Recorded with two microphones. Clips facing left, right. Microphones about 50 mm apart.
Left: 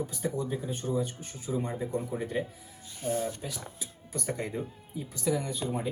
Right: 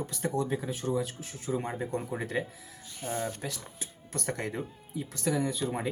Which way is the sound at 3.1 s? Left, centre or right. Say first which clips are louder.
Left 1 dB; right.